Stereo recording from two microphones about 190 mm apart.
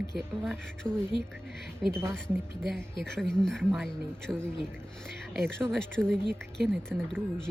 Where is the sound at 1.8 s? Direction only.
Centre (ahead or behind).